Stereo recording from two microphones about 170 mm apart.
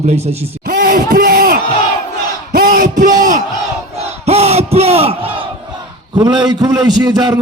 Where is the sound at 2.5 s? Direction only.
55° right (ahead or behind).